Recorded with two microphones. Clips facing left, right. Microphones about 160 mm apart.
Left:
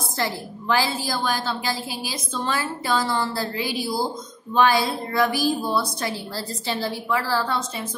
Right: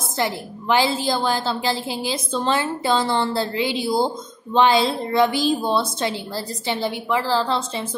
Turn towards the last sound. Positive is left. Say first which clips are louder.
# right 3 dB
turn(degrees=-30)  # may be behind; listen again after turning